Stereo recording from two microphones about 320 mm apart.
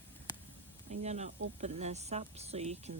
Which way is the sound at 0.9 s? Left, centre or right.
Right.